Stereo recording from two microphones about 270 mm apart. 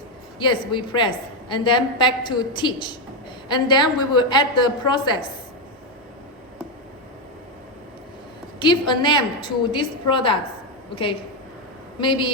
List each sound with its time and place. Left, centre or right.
0.3 s a woman's voice: centre
8.5 s a woman's voice: centre